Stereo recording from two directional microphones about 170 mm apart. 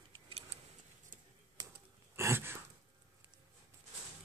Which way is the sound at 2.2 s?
15° right (ahead or behind).